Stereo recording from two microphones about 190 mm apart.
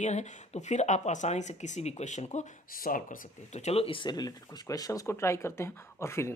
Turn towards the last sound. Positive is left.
turn(degrees=15)  # may be behind; listen again after turning